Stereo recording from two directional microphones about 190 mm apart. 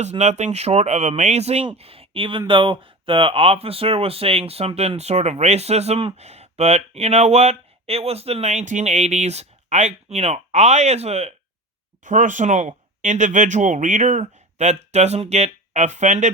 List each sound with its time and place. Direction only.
0.0 s speech: 35° right (ahead or behind)